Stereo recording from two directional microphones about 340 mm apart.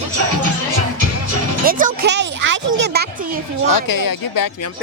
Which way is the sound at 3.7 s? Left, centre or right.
Left.